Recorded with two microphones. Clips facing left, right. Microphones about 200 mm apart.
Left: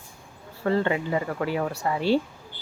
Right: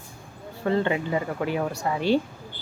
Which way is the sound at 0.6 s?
20° right (ahead or behind).